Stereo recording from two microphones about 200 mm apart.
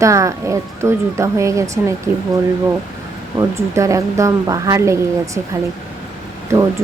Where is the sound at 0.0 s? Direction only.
15° right (ahead or behind).